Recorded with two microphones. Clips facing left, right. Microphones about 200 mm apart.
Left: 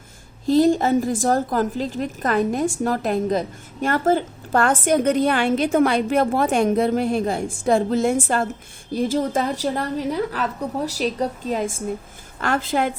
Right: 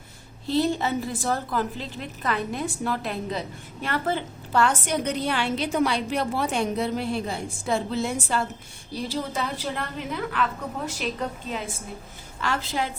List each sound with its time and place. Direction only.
0.4 s a woman's voice: 45° left (ahead or behind)
12.4 s a woman's voice: 50° left (ahead or behind)